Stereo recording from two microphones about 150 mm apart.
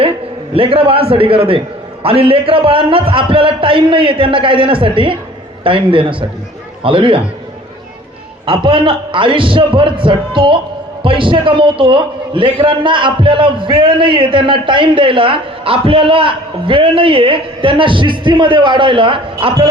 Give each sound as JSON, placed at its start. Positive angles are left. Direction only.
{"t": 0.5, "sound": "a man's voice", "side_deg": -40}
{"t": 8.4, "sound": "a man's voice", "side_deg": -35}